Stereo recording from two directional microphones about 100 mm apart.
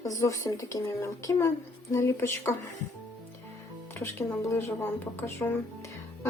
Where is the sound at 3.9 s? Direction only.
25° left (ahead or behind).